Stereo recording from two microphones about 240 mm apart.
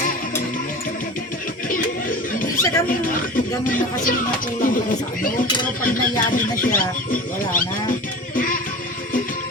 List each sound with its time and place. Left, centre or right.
1.7 s speech: left